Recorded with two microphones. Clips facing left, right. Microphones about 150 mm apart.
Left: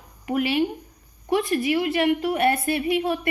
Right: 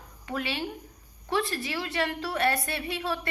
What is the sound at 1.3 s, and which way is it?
A woman's voice, 20° left (ahead or behind).